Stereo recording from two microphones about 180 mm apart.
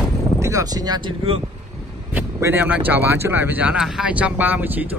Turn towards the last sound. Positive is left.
turn(degrees=-10)  # may be behind; listen again after turning